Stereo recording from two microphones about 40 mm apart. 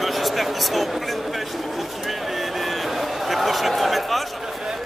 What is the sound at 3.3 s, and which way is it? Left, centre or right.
Speech, centre.